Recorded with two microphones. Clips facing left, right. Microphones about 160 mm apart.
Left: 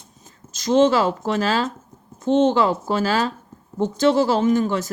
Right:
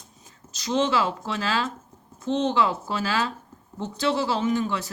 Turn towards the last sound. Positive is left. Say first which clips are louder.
# left 6 dB
turn(degrees=40)  # may be behind; listen again after turning